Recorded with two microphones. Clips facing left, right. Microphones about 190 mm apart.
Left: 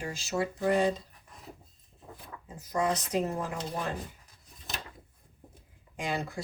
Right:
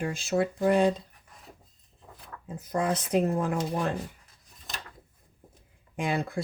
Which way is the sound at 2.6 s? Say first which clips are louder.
Right 1 dB; 55° right (ahead or behind).